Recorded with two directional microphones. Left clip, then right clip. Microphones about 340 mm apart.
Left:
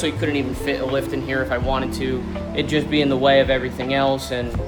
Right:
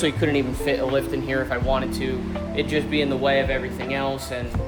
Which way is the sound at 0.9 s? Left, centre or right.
Centre.